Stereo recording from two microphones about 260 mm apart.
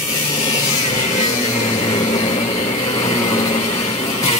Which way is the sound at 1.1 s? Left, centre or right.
Left.